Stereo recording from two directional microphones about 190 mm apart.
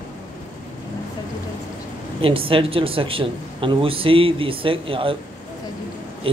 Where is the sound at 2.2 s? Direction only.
30° right (ahead or behind).